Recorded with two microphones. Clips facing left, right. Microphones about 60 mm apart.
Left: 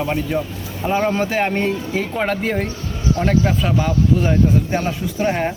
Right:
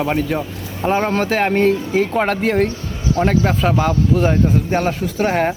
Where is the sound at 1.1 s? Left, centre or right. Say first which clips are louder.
Right 2 dB; right.